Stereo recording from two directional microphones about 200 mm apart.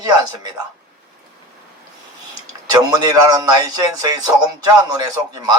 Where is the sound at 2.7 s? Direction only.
20° right (ahead or behind).